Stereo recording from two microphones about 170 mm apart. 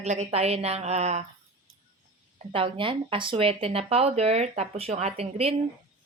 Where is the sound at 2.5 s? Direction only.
30° right (ahead or behind).